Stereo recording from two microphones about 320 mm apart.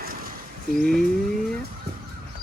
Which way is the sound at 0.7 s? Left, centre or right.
Centre.